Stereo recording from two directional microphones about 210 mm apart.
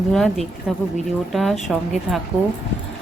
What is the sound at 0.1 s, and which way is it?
Speech, centre (ahead or behind).